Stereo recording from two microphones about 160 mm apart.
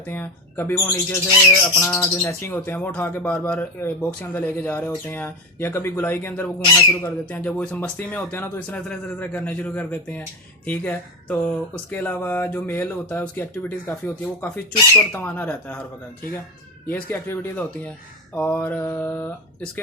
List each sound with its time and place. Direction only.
0.0 s speech: 10° left (ahead or behind)
16.9 s speech: 10° left (ahead or behind)